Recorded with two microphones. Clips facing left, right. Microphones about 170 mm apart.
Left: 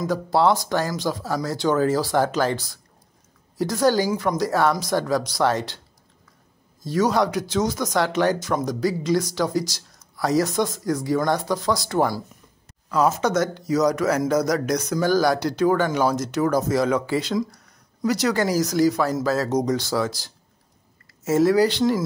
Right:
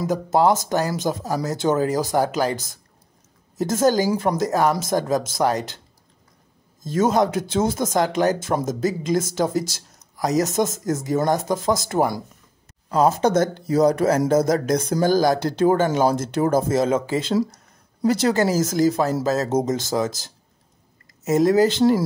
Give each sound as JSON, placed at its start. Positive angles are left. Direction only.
{"t": 0.0, "sound": "speech", "side_deg": -20}
{"t": 4.2, "sound": "speech", "side_deg": -25}
{"t": 6.8, "sound": "speech", "side_deg": -20}
{"t": 21.2, "sound": "speech", "side_deg": -20}